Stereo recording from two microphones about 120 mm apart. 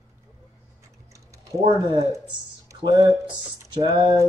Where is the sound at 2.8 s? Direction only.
40° right (ahead or behind).